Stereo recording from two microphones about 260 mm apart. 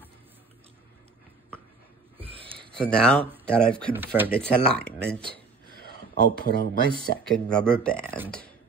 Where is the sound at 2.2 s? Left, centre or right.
Right.